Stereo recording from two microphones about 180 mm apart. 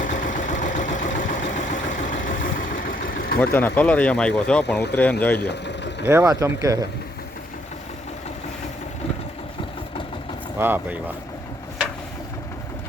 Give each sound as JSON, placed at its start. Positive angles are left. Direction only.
{"t": 0.0, "sound": "vehicle", "side_deg": 45}
{"t": 3.3, "sound": "speech", "side_deg": 10}
{"t": 5.4, "sound": "vehicle", "side_deg": 70}
{"t": 6.1, "sound": "speech", "side_deg": -15}
{"t": 10.6, "sound": "speech", "side_deg": -10}